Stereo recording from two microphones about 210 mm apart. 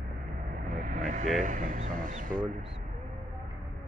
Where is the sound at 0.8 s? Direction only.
40° right (ahead or behind).